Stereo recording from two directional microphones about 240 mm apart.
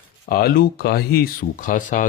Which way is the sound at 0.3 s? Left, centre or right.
Left.